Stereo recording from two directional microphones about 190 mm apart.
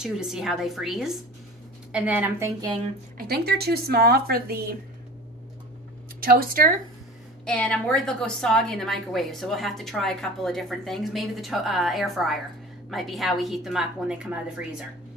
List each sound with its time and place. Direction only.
0.0 s a woman's voice: 5° right (ahead or behind)
3.2 s speech: 55° right (ahead or behind)
6.2 s speech: 50° right (ahead or behind)
7.4 s a woman's voice: 5° left (ahead or behind)